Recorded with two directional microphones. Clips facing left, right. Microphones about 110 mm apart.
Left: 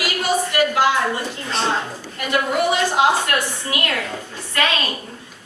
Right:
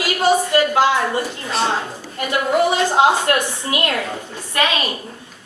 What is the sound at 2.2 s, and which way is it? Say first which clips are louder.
A woman's voice: right 3 dB; 25° right (ahead or behind).